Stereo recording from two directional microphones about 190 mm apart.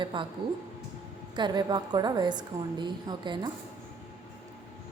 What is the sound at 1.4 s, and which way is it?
A woman's voice, 25° right (ahead or behind).